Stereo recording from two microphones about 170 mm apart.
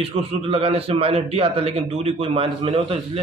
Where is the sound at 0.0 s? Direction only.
35° right (ahead or behind).